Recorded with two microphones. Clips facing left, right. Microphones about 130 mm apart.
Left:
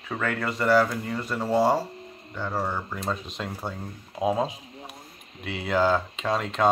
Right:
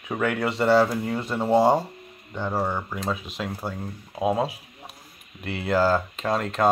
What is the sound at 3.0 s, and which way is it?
Speech, 5° right (ahead or behind).